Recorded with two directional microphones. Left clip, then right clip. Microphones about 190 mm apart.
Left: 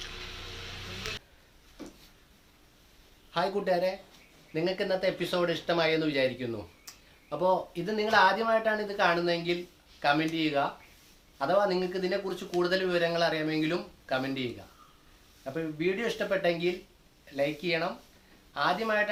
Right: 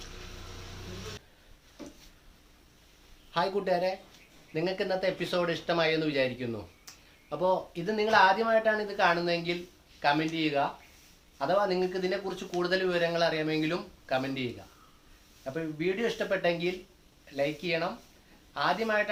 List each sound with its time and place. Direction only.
3.3 s speech: centre (ahead or behind)
6.9 s a sound: centre (ahead or behind)
7.3 s speech: centre (ahead or behind)
15.5 s speech: centre (ahead or behind)